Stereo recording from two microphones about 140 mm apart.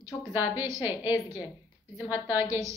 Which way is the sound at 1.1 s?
25° left (ahead or behind).